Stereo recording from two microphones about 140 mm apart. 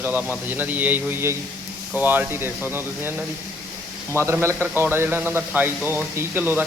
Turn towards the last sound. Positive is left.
turn(degrees=-15)  # may be behind; listen again after turning